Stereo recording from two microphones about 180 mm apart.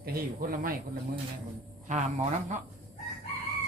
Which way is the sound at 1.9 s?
45° right (ahead or behind).